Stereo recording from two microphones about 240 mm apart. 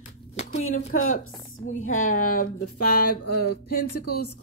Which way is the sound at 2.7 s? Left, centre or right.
Left.